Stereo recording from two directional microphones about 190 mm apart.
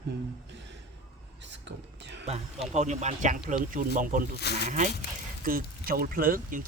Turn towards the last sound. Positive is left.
turn(degrees=-45)  # may be behind; listen again after turning